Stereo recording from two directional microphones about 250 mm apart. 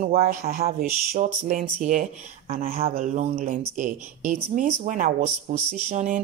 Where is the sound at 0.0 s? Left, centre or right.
Right.